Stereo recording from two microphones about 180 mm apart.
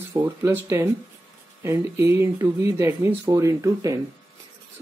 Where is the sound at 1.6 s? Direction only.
15° right (ahead or behind).